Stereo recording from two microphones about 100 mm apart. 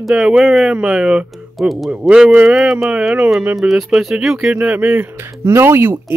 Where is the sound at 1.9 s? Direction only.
15° right (ahead or behind).